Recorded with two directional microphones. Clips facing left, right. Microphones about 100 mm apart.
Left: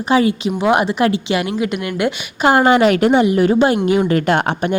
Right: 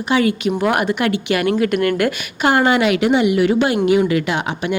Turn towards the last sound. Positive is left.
turn(degrees=50)  # may be behind; listen again after turning